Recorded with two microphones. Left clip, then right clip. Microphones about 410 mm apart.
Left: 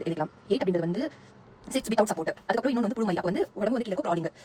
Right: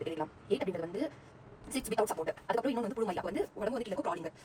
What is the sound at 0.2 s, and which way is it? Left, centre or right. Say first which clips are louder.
Speech: left 6 dB; left.